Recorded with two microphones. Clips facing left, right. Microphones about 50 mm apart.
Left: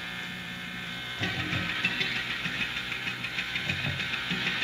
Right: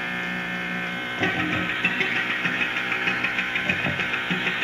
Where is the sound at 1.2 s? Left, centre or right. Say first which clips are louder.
Right 8 dB; right.